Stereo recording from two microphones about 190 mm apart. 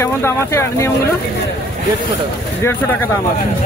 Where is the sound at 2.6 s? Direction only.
10° left (ahead or behind).